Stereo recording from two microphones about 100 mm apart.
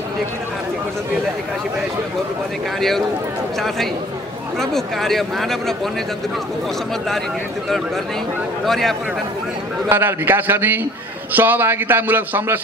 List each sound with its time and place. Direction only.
3.5 s speech: 5° left (ahead or behind)
8.6 s speech: centre (ahead or behind)
9.8 s a man's voice: 20° right (ahead or behind)